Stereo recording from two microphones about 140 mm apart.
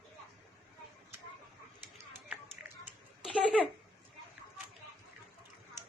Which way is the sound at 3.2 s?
5° right (ahead or behind).